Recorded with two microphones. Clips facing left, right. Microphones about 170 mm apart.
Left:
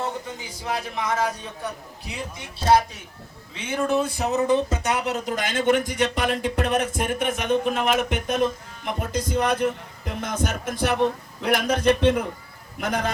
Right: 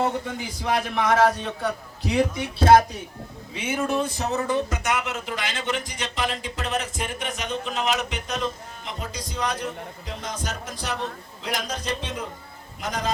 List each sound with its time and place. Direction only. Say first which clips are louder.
0.0 s a man's voice: right 4 dB; 75° right (ahead or behind); by 2.8 s 55° right (ahead or behind)
3.5 s speech: left 2 dB; 10° right (ahead or behind)
4.2 s a man's voice: left 4 dB; 20° left (ahead or behind); by 13.1 s 60° left (ahead or behind)